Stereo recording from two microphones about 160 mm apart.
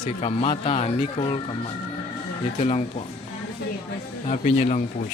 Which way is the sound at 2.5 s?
40° left (ahead or behind).